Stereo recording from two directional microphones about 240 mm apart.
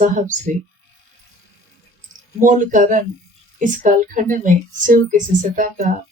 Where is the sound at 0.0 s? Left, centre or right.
Right.